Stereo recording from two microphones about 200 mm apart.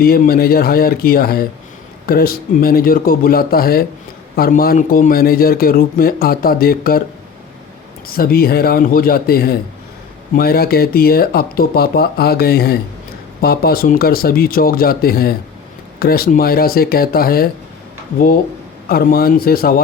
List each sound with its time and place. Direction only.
0.0 s a man's voice: 50° left (ahead or behind)
8.0 s a man's voice: 50° left (ahead or behind)
18.9 s a man's voice: 50° left (ahead or behind)